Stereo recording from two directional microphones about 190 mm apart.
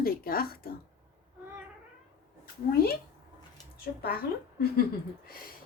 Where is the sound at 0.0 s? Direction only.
50° left (ahead or behind).